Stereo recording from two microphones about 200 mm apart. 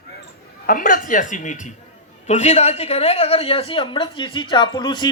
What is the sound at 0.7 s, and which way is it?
A woman's voice, 45° left (ahead or behind).